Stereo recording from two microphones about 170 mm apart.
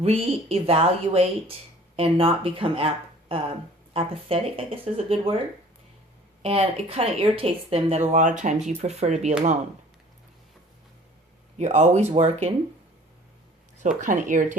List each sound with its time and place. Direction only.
0.0 s speech: 35° right (ahead or behind)
6.4 s speech: 35° right (ahead or behind)
11.5 s speech: 45° right (ahead or behind)
13.8 s speech: 50° right (ahead or behind)